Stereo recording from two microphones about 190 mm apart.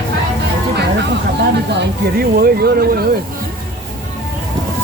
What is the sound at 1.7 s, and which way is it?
Speech, 60° right (ahead or behind).